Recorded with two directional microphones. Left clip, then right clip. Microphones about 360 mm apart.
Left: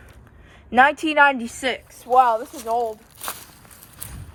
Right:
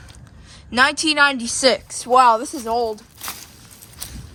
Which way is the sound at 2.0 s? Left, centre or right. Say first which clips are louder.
Right 3 dB; right.